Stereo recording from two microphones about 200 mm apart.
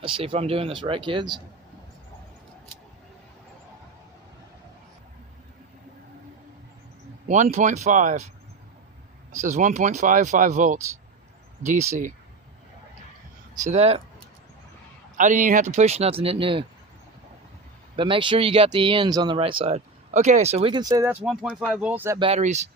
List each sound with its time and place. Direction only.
0.0 s speech: 25° right (ahead or behind)
7.3 s speech: 35° right (ahead or behind)
9.4 s speech: 40° right (ahead or behind)
13.7 s speech: 35° right (ahead or behind)
15.2 s speech: 40° right (ahead or behind)
17.9 s speech: 25° right (ahead or behind)
21.2 s speech: 5° right (ahead or behind)
22.2 s speech: 35° right (ahead or behind)